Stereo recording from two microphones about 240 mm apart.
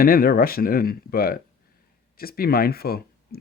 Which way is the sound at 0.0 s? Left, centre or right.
Left.